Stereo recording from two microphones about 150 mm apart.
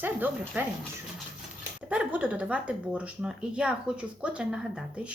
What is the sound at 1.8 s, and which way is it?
A woman's voice, 10° right (ahead or behind).